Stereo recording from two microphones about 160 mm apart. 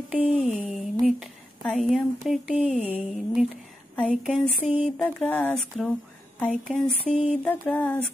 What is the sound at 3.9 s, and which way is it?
Speech, 10° left (ahead or behind).